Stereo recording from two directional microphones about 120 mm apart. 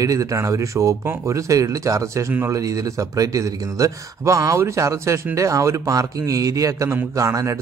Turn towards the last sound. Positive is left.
turn(degrees=-25)  # may be behind; listen again after turning